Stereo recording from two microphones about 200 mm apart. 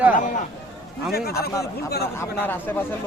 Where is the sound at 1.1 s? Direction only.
50° left (ahead or behind).